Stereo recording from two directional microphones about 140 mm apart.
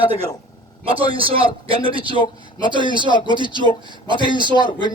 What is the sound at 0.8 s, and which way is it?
A man's voice, 40° right (ahead or behind).